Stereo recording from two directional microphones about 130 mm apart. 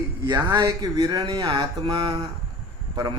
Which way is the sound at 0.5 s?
35° right (ahead or behind).